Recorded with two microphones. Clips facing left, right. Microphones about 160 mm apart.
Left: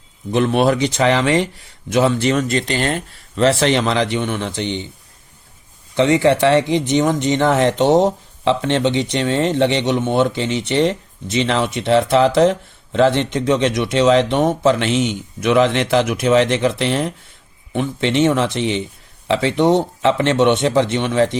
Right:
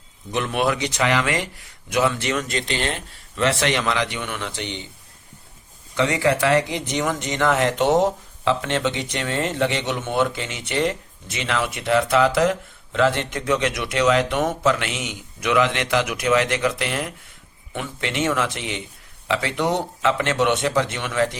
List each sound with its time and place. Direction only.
0.3 s speech: 35° left (ahead or behind)
6.0 s speech: 25° left (ahead or behind)